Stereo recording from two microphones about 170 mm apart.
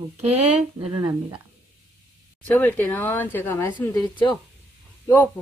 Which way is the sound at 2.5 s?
10° left (ahead or behind).